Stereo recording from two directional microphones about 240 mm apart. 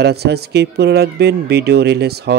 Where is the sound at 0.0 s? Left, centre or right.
Right.